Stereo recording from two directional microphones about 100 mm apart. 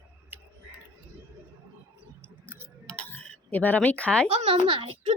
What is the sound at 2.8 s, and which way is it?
Dishes, 10° left (ahead or behind).